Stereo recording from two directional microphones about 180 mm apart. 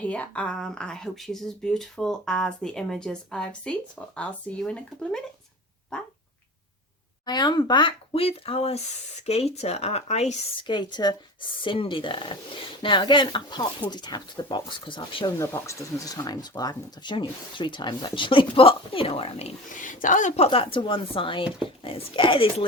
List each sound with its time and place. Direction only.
0.0 s speech: 10° left (ahead or behind)
7.3 s speech: 25° left (ahead or behind)
15.4 s speech: 15° left (ahead or behind)